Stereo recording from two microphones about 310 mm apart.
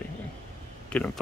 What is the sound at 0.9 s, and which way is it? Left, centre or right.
Speech, centre.